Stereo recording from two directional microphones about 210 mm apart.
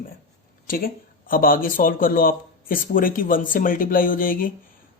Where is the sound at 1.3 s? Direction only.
40° left (ahead or behind).